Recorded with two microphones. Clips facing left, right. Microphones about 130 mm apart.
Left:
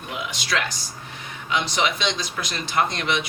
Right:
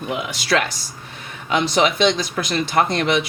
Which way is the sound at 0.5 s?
55° right (ahead or behind).